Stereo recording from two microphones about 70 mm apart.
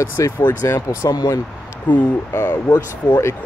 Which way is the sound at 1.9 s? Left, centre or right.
Left.